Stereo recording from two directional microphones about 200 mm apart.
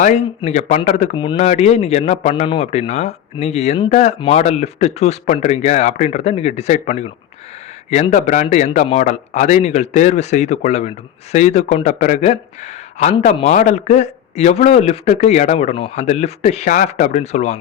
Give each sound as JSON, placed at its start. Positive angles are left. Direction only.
{"t": 0.0, "sound": "a man's voice", "side_deg": 35}
{"t": 1.1, "sound": "a man's voice", "side_deg": 25}